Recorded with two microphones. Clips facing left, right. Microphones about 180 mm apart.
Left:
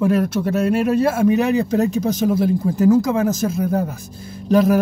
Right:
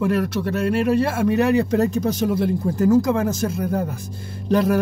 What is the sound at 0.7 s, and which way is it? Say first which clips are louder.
Speech: left 1 dB; 5° left (ahead or behind).